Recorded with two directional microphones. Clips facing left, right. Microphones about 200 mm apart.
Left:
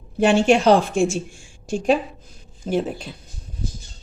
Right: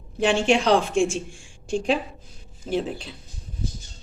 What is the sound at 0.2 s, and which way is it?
A woman's voice, 40° left (ahead or behind).